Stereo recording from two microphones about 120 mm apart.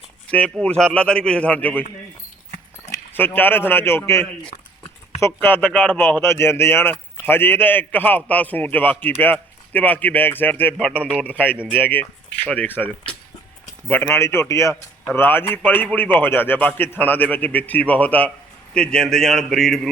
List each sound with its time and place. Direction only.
0.3 s a man's voice: 10° left (ahead or behind)
3.1 s a man's voice: 15° left (ahead or behind)